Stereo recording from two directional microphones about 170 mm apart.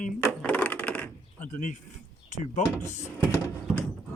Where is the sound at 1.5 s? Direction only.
45° left (ahead or behind).